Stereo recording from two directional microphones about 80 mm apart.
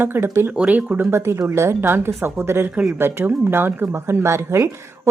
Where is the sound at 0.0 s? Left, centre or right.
Right.